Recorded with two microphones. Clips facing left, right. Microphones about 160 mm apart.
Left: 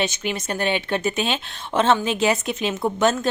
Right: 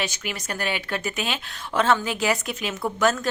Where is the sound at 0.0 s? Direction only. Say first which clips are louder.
Left 5 dB; 25° left (ahead or behind).